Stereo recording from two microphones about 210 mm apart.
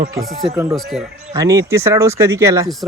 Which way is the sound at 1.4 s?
15° right (ahead or behind).